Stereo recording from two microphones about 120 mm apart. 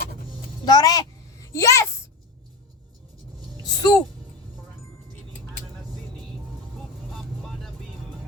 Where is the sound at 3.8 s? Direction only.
35° left (ahead or behind).